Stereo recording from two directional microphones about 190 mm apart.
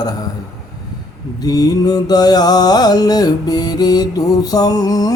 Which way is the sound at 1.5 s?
20° left (ahead or behind).